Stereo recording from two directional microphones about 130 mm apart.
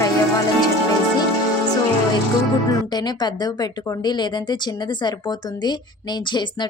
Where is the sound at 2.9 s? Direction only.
35° left (ahead or behind).